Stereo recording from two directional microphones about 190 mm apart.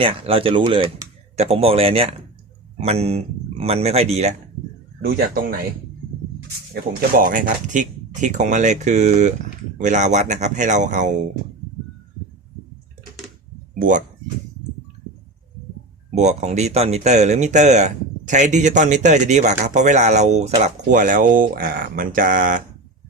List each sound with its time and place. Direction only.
0.0 s speech: 30° right (ahead or behind)
5.0 s speech: 50° right (ahead or behind)
7.1 s speech: 45° right (ahead or behind)
13.7 s speech: 45° right (ahead or behind)
16.1 s speech: 35° right (ahead or behind)